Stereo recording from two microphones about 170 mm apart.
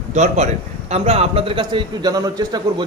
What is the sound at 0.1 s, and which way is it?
A man's voice, 40° right (ahead or behind).